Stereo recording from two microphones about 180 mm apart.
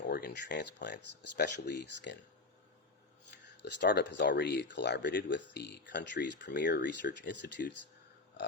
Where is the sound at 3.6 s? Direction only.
70° left (ahead or behind).